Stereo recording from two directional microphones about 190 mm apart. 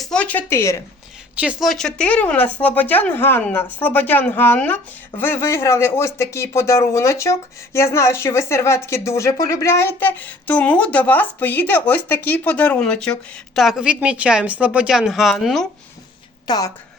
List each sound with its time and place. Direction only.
0.0 s speech: 5° left (ahead or behind)
1.4 s a woman's voice: 5° right (ahead or behind)
16.5 s speech: 20° left (ahead or behind)